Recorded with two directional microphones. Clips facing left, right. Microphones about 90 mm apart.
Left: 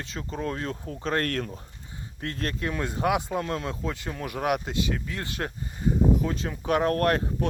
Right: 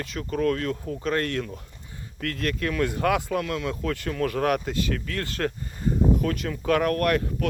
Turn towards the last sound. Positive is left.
turn(degrees=30)  # may be behind; listen again after turning